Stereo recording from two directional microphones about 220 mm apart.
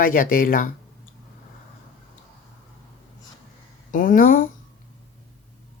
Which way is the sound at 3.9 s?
40° left (ahead or behind).